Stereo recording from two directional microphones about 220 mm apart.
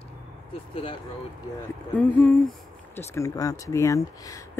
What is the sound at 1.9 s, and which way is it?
Speech, 5° left (ahead or behind).